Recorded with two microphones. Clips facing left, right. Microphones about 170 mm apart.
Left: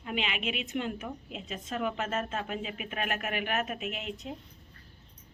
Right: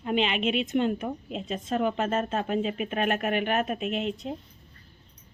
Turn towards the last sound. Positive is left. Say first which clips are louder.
# right 8 dB
turn(degrees=-30)  # may be behind; listen again after turning